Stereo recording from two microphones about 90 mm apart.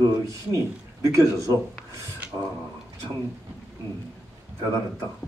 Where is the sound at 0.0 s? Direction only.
40° right (ahead or behind).